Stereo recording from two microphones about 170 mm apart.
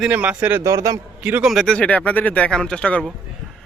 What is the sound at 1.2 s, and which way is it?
Speech, 5° right (ahead or behind).